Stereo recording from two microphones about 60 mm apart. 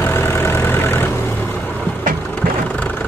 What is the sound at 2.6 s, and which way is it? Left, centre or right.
Vehicle, left.